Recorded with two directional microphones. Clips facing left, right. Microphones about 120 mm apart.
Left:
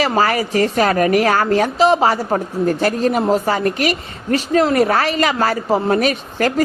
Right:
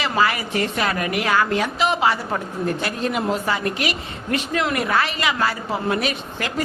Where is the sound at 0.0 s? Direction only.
40° left (ahead or behind).